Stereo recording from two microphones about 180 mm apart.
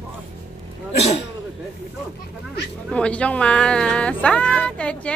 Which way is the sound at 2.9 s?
5° left (ahead or behind).